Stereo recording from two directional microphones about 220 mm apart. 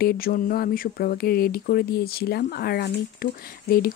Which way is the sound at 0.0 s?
40° left (ahead or behind).